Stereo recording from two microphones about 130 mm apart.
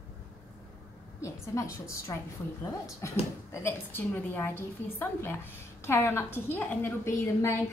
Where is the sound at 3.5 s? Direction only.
20° left (ahead or behind).